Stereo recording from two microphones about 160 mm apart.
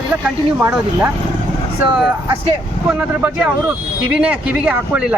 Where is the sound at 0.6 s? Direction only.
15° right (ahead or behind).